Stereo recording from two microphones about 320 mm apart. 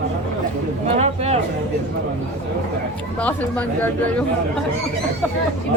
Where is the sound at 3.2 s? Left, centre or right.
Centre.